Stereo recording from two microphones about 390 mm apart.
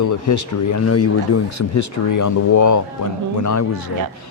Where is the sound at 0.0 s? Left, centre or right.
Left.